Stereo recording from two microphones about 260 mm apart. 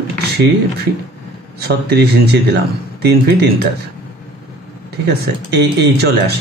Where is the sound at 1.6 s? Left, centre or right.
Right.